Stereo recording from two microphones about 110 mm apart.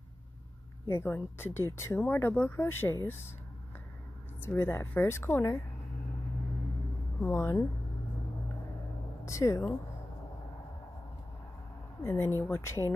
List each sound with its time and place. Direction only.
0.8 s speech: 20° left (ahead or behind)
4.4 s speech: 20° left (ahead or behind)
7.2 s speech: 20° left (ahead or behind)
9.2 s speech: 30° left (ahead or behind)
12.0 s speech: 20° left (ahead or behind)